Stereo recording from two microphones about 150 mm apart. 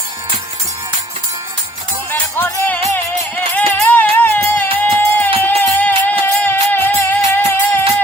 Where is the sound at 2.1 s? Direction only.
15° left (ahead or behind).